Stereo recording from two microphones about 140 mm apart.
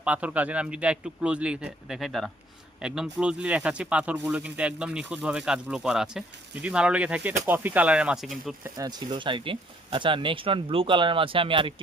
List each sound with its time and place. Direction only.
0.0 s speech: 10° right (ahead or behind)
8.6 s speech: 25° right (ahead or behind)